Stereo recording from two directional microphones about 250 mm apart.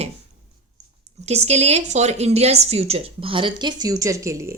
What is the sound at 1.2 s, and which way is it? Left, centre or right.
A woman's voice, right.